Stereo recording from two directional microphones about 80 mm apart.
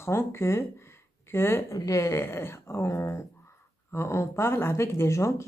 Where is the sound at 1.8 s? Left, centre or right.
Left.